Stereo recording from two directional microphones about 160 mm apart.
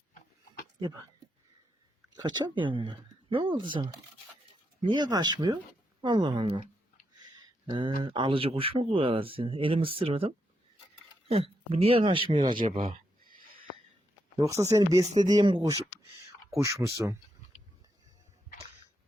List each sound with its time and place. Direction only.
0.1 s a sound: 55° left (ahead or behind)
2.1 s speech: 25° right (ahead or behind)
7.7 s speech: 30° right (ahead or behind)
13.2 s a sound: 65° right (ahead or behind)
14.3 s speech: 20° right (ahead or behind)
15.0 s speech: 45° right (ahead or behind)
15.3 s speech: 25° right (ahead or behind)